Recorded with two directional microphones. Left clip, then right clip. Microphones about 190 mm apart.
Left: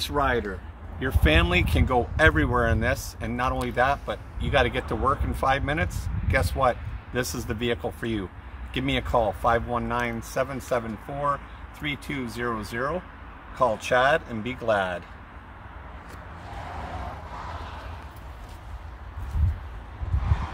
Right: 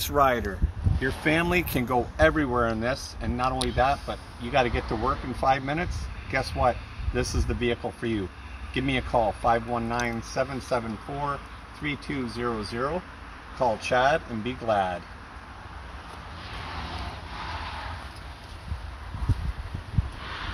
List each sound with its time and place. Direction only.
0.0 s speech: 45° right (ahead or behind)
1.2 s speech: centre (ahead or behind)
11.8 s speech: 10° left (ahead or behind)